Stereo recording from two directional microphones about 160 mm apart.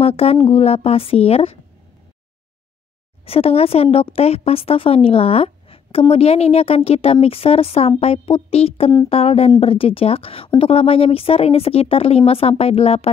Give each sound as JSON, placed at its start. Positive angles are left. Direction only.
{"t": 0.0, "sound": "a woman's voice", "side_deg": 40}
{"t": 3.3, "sound": "a woman's voice", "side_deg": 35}